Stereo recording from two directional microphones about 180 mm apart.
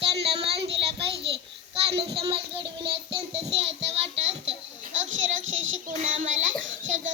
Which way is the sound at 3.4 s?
35° right (ahead or behind).